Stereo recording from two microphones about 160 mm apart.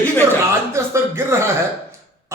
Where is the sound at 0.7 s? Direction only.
15° right (ahead or behind).